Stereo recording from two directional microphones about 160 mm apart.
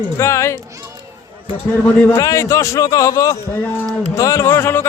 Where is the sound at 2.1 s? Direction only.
20° left (ahead or behind).